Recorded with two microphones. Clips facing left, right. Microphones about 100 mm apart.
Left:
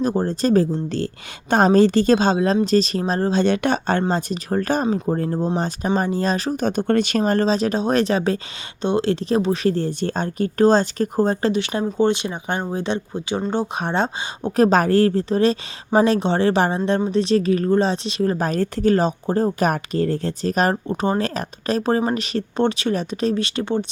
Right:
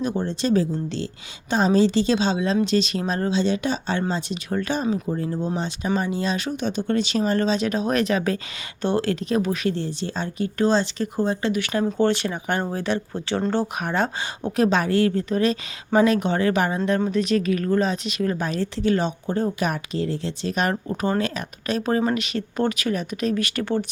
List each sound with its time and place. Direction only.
0.0 s speech: 40° left (ahead or behind)
3.3 s speech: 60° left (ahead or behind)
4.1 s speech: 40° left (ahead or behind)
7.3 s speech: 35° left (ahead or behind)
9.7 s speech: 50° left (ahead or behind)
11.5 s speech: 25° left (ahead or behind)
14.5 s speech: 40° left (ahead or behind)
20.8 s speech: 25° left (ahead or behind)